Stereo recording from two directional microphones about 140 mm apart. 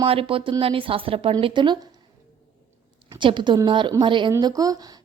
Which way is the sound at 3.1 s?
35° right (ahead or behind).